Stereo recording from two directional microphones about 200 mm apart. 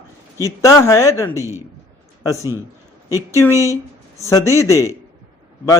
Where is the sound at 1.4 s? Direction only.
15° right (ahead or behind).